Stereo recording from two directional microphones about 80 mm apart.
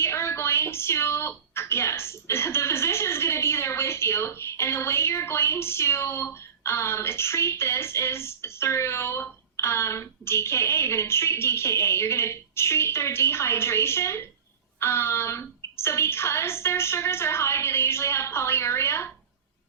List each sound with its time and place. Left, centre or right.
0.0 s a woman's voice: left